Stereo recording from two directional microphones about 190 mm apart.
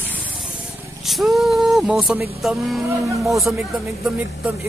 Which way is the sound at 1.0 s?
Centre (ahead or behind).